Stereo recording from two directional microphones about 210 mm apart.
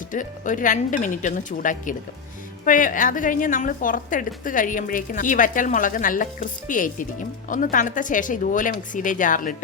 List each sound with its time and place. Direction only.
0.1 s a woman's voice: 40° left (ahead or behind)